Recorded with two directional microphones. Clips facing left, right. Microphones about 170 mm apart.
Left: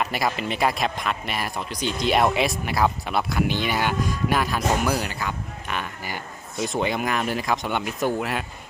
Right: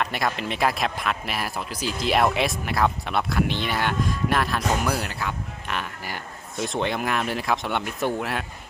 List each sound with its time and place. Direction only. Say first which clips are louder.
0.0 s speech: left 1 dB; 5° left (ahead or behind)